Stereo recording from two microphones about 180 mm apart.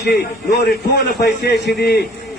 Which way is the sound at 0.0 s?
65° left (ahead or behind).